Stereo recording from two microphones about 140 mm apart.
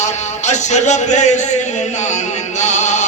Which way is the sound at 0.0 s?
55° left (ahead or behind).